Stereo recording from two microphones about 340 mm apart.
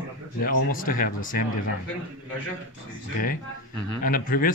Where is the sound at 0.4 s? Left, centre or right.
Left.